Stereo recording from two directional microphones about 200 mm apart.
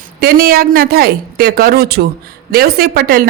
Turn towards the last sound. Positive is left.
turn(degrees=-50)  # may be behind; listen again after turning